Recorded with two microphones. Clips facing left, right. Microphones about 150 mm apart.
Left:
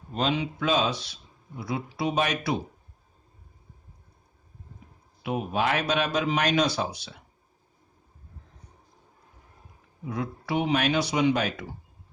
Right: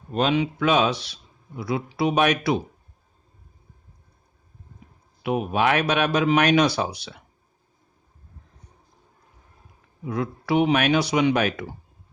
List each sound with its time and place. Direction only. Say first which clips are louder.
0.1 s speech: right 5 dB; 65° right (ahead or behind)
5.2 s speech: right 5 dB; 70° right (ahead or behind)
10.1 s speech: right 6 dB; 70° right (ahead or behind)